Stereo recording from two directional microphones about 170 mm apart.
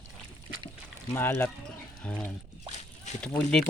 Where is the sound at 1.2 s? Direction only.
10° left (ahead or behind).